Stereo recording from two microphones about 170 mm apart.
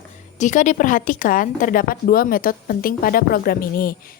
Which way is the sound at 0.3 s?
45° left (ahead or behind).